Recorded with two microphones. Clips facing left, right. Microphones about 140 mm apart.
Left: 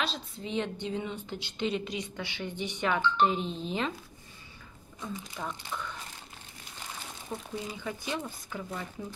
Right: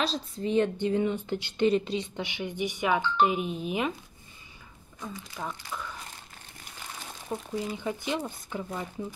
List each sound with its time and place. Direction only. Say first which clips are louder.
0.0 s a woman's voice: right 5 dB; 40° right (ahead or behind)
1.9 s speech: right 5 dB; 30° right (ahead or behind)
2.2 s speech: right 4 dB; 15° right (ahead or behind)
5.0 s speech: right 1 dB; 5° right (ahead or behind)
7.3 s speech: right 5 dB; 20° right (ahead or behind)